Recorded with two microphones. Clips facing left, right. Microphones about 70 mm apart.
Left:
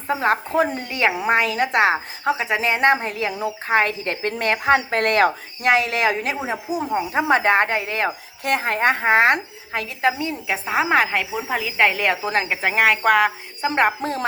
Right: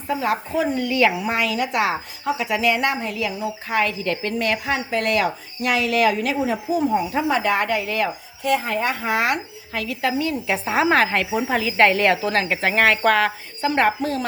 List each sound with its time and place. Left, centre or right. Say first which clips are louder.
0.1 s speech: left 2 dB; left
7.3 s speech: left 5 dB; left
8.4 s speech: left 2 dB; left
10.4 s speech: even; centre